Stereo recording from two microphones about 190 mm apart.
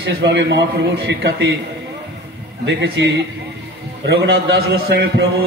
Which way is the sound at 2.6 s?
75° right (ahead or behind).